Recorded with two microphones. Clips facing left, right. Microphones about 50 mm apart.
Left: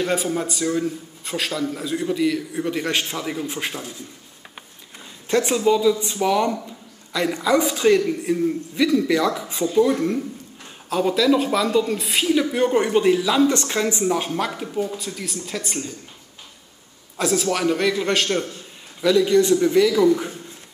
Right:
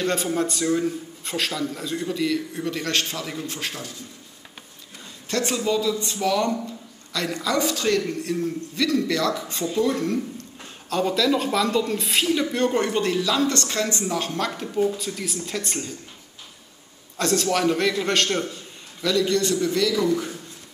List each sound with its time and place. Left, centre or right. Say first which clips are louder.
0.0 s speech: left 1 dB; centre
5.3 s speech: left 5 dB; centre
17.2 s a man's voice: left 1 dB; centre
18.9 s speech: left 5 dB; centre